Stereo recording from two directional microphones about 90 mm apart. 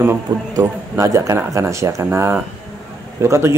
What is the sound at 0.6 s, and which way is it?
Speech, 30° right (ahead or behind).